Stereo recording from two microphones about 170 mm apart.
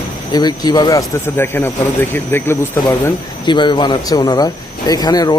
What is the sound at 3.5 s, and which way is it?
Speech, 25° left (ahead or behind).